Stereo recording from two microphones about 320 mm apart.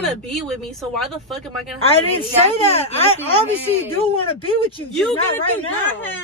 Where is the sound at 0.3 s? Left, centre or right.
Centre.